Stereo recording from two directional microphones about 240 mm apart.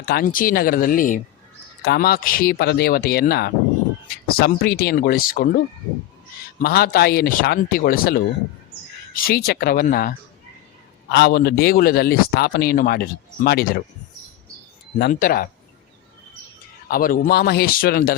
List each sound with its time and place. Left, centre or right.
0.0 s a man's voice: left
6.6 s a man's voice: left
14.9 s a man's voice: left
16.9 s a man's voice: left